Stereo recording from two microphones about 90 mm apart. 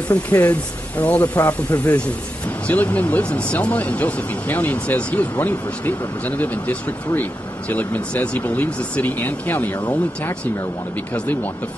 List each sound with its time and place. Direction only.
0.1 s speech: 15° left (ahead or behind)